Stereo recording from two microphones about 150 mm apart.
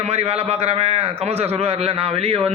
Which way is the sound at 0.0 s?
45° right (ahead or behind).